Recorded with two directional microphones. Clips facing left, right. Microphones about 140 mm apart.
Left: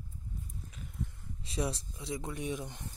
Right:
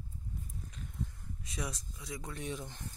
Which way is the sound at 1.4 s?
30° left (ahead or behind).